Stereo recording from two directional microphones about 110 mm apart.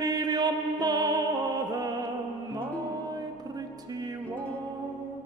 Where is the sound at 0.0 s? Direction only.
35° right (ahead or behind).